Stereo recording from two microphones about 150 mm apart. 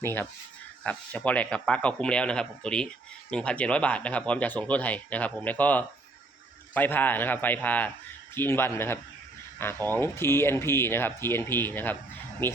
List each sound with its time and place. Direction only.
0.0 s speech: 15° left (ahead or behind)